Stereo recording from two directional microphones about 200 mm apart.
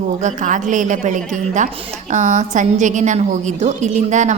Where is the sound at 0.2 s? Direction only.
40° right (ahead or behind).